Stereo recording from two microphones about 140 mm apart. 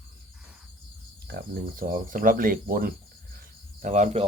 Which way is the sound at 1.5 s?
80° right.